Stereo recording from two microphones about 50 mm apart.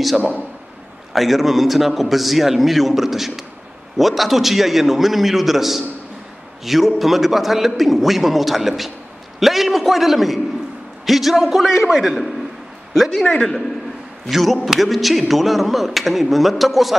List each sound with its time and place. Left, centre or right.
1.1 s a man's voice: centre
13.3 s a man's voice: centre
14.3 s a man's voice: centre